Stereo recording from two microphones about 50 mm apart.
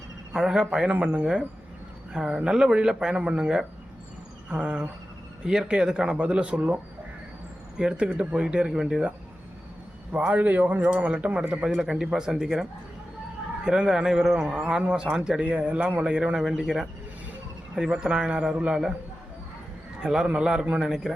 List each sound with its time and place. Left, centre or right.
0.3 s speech: centre
7.9 s speech: right
10.1 s speech: right
11.1 s speech: right
11.8 s speech: centre
13.7 s speech: centre
20.0 s a man's voice: centre